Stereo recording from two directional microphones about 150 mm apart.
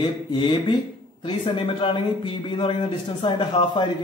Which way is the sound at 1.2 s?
35° left (ahead or behind).